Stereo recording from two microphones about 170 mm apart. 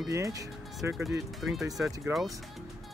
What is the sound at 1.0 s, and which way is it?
Speech, centre (ahead or behind).